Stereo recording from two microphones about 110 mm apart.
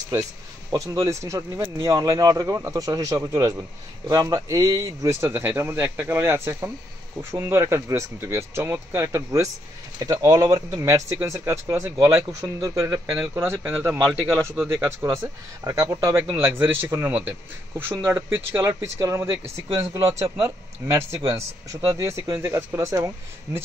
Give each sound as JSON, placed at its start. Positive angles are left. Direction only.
{"t": 0.7, "sound": "speech", "side_deg": -30}